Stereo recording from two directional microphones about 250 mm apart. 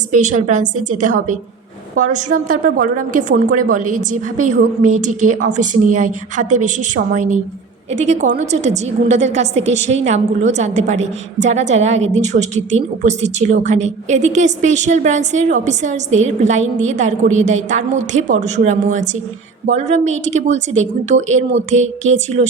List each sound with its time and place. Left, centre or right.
0.1 s a woman's voice: right